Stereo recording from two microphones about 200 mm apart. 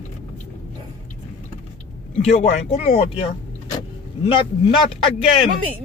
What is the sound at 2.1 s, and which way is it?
A man's voice, 35° left (ahead or behind).